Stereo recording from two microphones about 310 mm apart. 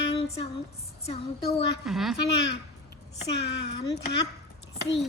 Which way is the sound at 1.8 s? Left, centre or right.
Centre.